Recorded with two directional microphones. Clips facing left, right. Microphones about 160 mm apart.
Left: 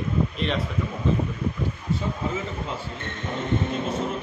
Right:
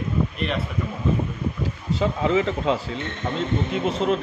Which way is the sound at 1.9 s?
90° right.